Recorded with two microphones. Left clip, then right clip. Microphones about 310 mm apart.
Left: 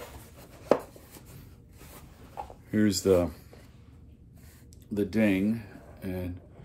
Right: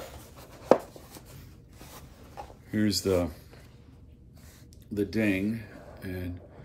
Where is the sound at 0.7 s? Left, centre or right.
Centre.